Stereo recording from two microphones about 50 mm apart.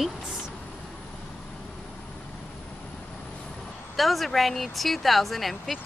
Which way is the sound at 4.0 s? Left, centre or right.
Centre.